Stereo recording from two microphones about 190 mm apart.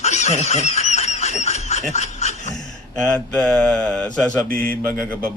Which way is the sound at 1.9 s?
35° left (ahead or behind).